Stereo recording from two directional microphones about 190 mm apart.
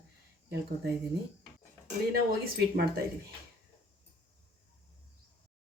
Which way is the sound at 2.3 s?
55° right (ahead or behind).